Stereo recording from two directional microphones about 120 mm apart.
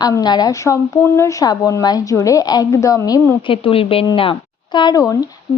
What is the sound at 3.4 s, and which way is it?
A woman's voice, 50° left (ahead or behind).